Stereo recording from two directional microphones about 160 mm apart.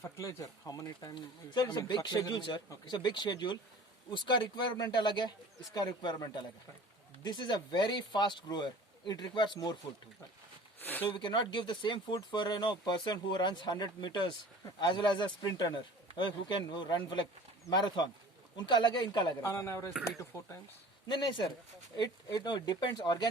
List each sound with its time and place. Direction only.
0.0 s speech: 20° left (ahead or behind)
10.8 s speech: 10° left (ahead or behind)
11.1 s speech: 30° left (ahead or behind)
21.1 s speech: 30° left (ahead or behind)